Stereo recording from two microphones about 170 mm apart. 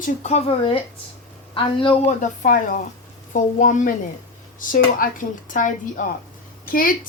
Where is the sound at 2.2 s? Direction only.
50° left (ahead or behind).